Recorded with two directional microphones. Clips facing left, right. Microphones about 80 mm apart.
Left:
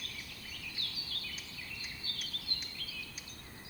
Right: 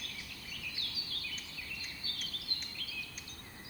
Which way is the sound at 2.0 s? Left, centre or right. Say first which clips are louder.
Even; left.